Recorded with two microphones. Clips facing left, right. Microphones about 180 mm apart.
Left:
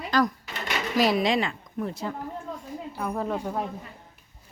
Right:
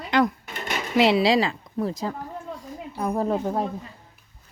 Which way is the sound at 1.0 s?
30° right (ahead or behind).